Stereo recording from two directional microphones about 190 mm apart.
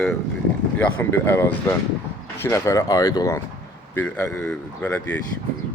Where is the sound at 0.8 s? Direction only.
10° left (ahead or behind).